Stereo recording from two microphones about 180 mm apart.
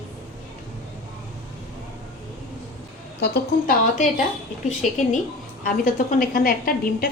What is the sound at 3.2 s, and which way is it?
Speech, 70° left (ahead or behind).